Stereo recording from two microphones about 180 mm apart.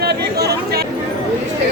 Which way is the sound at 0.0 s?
65° right (ahead or behind).